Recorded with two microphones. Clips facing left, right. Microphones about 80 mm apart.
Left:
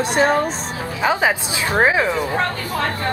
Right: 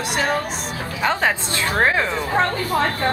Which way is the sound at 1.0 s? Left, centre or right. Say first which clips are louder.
Left 2 dB; centre.